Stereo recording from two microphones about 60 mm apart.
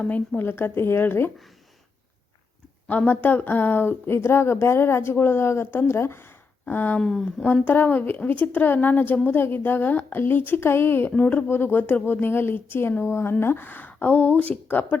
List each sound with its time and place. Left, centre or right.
0.3 s speech: left
3.1 s speech: left
7.0 s speech: centre
7.4 s a woman's voice: left
11.4 s speech: left